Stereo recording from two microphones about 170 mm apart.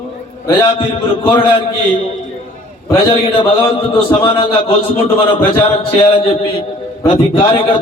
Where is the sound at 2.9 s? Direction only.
30° left (ahead or behind).